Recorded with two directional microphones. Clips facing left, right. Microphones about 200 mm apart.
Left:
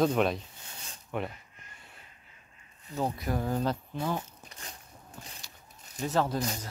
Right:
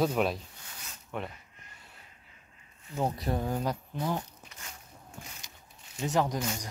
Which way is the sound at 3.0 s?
30° right (ahead or behind).